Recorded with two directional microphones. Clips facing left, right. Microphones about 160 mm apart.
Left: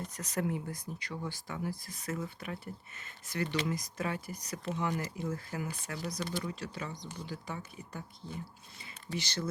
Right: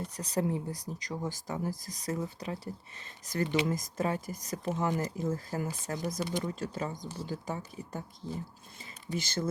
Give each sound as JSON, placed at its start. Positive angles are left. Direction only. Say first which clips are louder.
{"t": 0.0, "sound": "speech", "louder": "right 3 dB", "side_deg": -35}
{"t": 3.7, "sound": "speech", "louder": "right 4 dB", "side_deg": -40}